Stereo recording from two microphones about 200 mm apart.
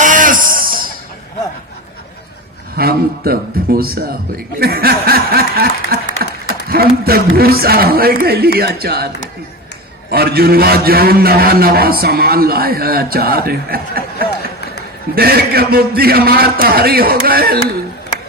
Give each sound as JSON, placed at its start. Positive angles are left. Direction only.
{"t": 0.0, "sound": "music", "side_deg": -40}
{"t": 2.7, "sound": "a man's voice", "side_deg": -50}
{"t": 10.1, "sound": "a man's voice", "side_deg": -50}